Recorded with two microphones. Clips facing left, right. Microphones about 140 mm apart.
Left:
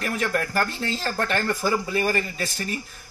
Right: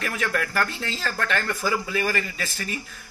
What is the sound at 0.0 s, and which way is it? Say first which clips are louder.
Speech: left 2 dB; 40° left (ahead or behind).